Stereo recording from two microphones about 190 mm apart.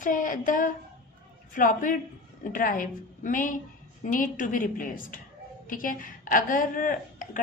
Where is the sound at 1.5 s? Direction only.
45° left (ahead or behind).